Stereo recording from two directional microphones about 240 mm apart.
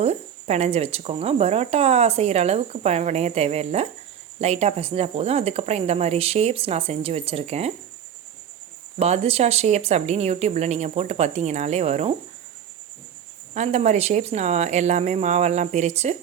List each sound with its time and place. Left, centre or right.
0.0 s speech: right
9.0 s speech: right
13.5 s speech: right